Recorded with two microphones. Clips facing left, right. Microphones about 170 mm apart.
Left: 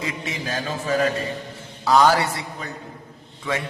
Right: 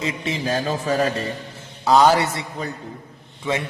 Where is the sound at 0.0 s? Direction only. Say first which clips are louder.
Right 4 dB; 25° right (ahead or behind).